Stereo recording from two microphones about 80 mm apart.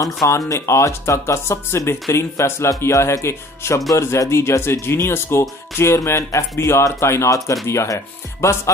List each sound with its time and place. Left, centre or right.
0.0 s speech: left